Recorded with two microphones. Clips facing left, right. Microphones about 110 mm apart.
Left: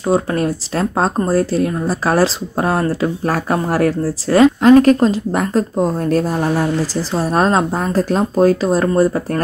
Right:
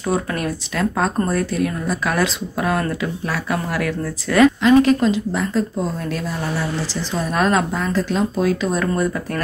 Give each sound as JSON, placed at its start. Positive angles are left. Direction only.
{"t": 0.0, "sound": "speech", "side_deg": 30}
{"t": 4.6, "sound": "speech", "side_deg": 45}
{"t": 7.2, "sound": "speech", "side_deg": 35}